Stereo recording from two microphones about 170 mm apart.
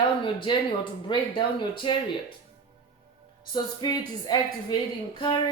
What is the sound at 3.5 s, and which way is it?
Speech, 25° left (ahead or behind).